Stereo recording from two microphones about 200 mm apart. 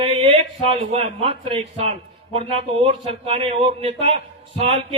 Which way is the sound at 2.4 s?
30° right (ahead or behind).